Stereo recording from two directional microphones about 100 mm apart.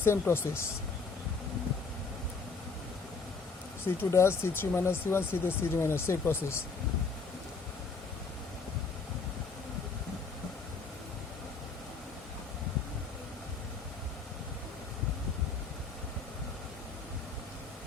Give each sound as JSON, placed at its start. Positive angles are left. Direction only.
{"t": 0.0, "sound": "speech", "side_deg": 25}
{"t": 3.8, "sound": "speech", "side_deg": 25}